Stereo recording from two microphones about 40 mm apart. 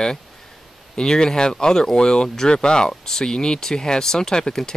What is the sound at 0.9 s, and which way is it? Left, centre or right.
Speech, centre.